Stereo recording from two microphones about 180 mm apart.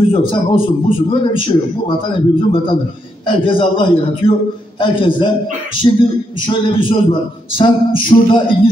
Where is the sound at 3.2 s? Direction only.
30° left (ahead or behind).